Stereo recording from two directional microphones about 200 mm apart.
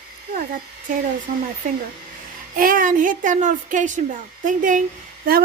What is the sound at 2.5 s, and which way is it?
A woman's voice, 45° right (ahead or behind).